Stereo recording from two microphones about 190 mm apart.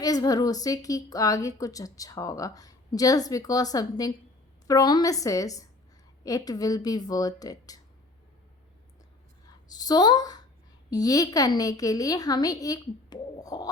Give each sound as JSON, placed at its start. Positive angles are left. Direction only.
{"t": 0.0, "sound": "a woman's voice", "side_deg": 20}
{"t": 9.6, "sound": "a woman's voice", "side_deg": 20}